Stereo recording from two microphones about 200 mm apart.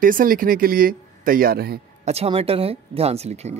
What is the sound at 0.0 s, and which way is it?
Speech, 45° right (ahead or behind).